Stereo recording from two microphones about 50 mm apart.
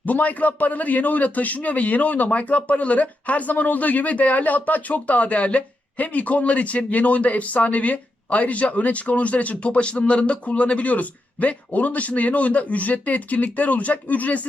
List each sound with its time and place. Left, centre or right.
0.0 s a man's voice: left